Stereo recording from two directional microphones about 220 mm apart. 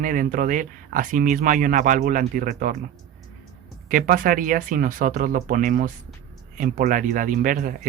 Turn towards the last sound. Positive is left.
turn(degrees=-40)  # may be behind; listen again after turning